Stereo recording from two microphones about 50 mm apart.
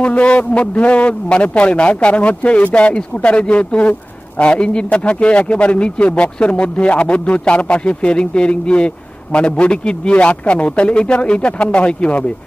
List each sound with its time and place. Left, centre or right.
0.0 s speech: left